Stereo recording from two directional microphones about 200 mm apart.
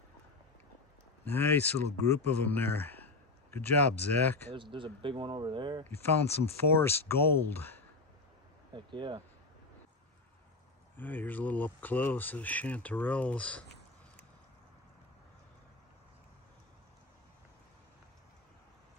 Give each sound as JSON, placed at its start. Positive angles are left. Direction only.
{"t": 1.3, "sound": "speech", "side_deg": 10}
{"t": 4.6, "sound": "speech", "side_deg": -25}
{"t": 6.8, "sound": "speech", "side_deg": 10}
{"t": 8.7, "sound": "speech", "side_deg": -25}
{"t": 11.0, "sound": "speech", "side_deg": 10}